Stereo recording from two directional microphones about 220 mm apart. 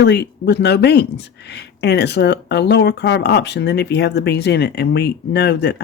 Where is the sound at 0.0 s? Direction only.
50° left (ahead or behind).